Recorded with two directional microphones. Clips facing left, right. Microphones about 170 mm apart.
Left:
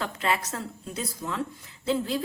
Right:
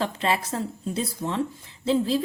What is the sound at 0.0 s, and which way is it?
A woman's voice, 30° right (ahead or behind).